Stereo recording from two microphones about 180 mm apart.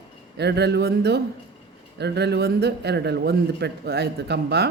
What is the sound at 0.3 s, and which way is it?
A man's voice, 65° right (ahead or behind).